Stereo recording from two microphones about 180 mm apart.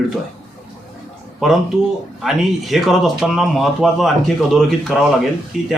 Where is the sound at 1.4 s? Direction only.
Centre (ahead or behind).